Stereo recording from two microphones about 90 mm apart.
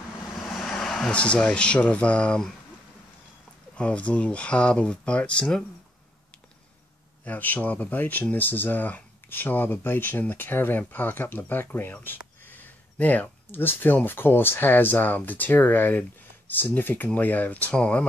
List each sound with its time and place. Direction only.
0.5 s speech: centre (ahead or behind)
3.7 s speech: 15° left (ahead or behind)
7.2 s speech: 20° left (ahead or behind)